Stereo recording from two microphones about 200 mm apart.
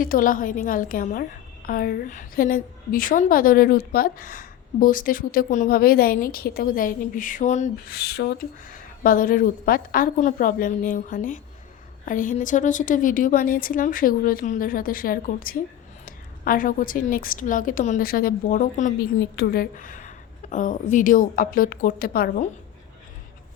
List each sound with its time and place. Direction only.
0.0 s a woman's voice: 45° left (ahead or behind)
7.9 s a woman's voice: 50° left (ahead or behind)